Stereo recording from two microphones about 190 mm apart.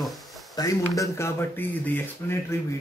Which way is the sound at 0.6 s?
20° left (ahead or behind).